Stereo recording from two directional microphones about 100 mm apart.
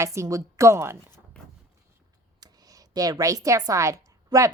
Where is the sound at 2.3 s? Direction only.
40° right (ahead or behind).